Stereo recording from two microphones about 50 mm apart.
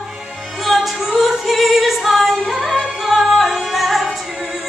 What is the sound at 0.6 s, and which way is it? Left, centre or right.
Singing, centre.